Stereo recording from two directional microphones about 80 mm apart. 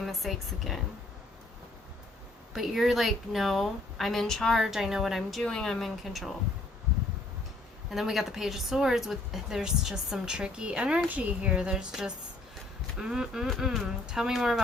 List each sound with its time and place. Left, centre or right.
0.0 s speech: centre
2.5 s speech: centre
7.9 s a woman's voice: centre